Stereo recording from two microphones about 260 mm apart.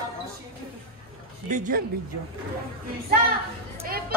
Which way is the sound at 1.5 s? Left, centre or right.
Right.